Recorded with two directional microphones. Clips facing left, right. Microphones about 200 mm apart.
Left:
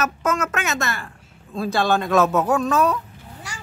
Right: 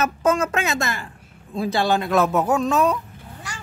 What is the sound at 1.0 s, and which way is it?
A man's voice, 15° right (ahead or behind).